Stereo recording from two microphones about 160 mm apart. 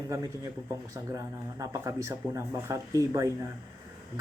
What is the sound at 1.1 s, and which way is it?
Speech, 20° right (ahead or behind).